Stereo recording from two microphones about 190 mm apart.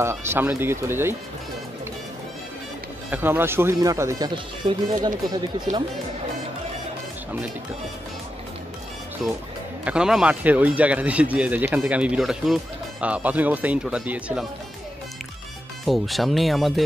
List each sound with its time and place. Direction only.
0.0 s speech: 15° right (ahead or behind)
3.1 s speech: 10° right (ahead or behind)
9.2 s speech: centre (ahead or behind)
15.8 s speech: centre (ahead or behind)